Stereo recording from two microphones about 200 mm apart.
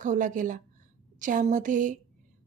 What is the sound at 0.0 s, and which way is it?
A woman's voice, 40° right (ahead or behind).